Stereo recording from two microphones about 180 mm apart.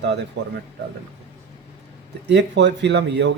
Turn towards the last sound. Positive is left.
turn(degrees=-75)  # may be behind; listen again after turning